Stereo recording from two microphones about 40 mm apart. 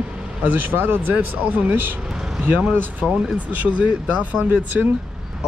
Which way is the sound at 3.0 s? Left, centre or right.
Centre.